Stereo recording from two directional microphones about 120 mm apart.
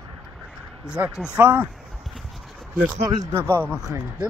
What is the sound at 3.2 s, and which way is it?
Speech, 25° right (ahead or behind).